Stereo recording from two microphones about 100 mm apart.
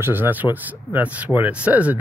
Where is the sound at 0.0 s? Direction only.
20° right (ahead or behind).